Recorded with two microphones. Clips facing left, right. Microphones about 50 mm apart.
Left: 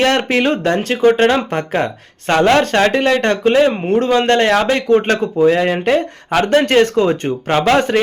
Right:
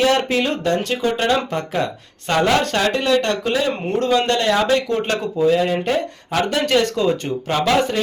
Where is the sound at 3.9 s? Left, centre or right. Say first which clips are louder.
Left 4 dB; left.